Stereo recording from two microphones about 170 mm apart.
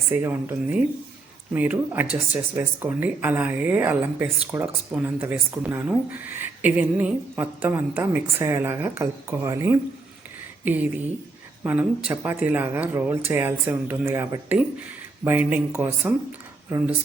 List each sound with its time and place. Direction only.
0.1 s speech: 15° right (ahead or behind)
11.6 s speech: 10° right (ahead or behind)